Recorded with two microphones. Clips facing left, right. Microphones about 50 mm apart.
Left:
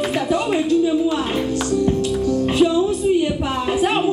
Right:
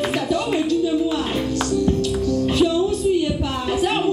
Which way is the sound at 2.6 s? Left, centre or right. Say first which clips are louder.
Left 3 dB; left.